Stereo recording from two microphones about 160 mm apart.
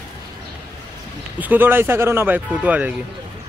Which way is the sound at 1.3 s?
10° right (ahead or behind).